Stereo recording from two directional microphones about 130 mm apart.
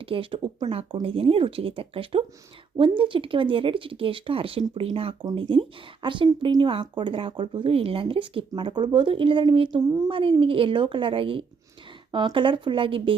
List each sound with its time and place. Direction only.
0.0 s a woman's voice: 45° right (ahead or behind)